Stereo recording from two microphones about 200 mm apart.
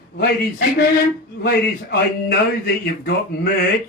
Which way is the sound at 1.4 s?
55° left (ahead or behind).